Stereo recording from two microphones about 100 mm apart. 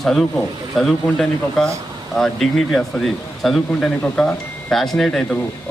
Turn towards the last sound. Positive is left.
turn(degrees=5)  # may be behind; listen again after turning